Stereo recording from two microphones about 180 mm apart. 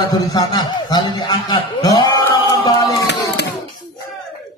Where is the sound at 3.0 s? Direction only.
70° left (ahead or behind).